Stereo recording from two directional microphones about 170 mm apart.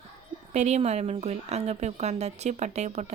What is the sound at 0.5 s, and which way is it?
A woman's voice, 40° right (ahead or behind).